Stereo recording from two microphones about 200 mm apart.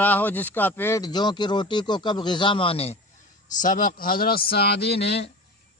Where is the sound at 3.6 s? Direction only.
40° left (ahead or behind).